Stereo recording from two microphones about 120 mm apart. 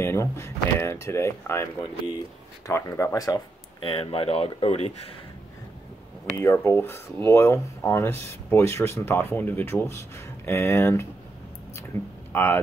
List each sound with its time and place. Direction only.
0.0 s speech: 25° left (ahead or behind)
3.8 s speech: 50° left (ahead or behind)
6.3 s speech: 20° left (ahead or behind)
12.3 s speech: 15° left (ahead or behind)